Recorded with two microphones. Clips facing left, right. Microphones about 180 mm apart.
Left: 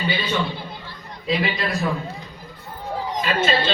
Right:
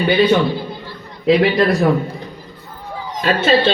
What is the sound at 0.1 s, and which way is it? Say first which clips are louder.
A man's voice: right 11 dB; 65° right (ahead or behind).